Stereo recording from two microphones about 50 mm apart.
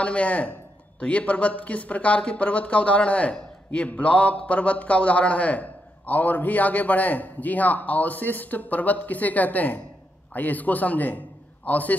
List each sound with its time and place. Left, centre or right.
0.0 s a man's voice: left